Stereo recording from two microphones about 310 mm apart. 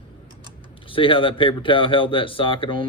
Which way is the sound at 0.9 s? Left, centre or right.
Centre.